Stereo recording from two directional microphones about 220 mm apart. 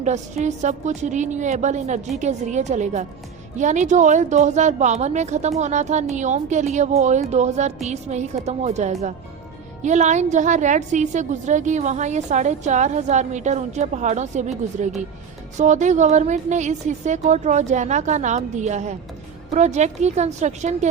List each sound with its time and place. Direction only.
0.0 s a woman's voice: 30° right (ahead or behind)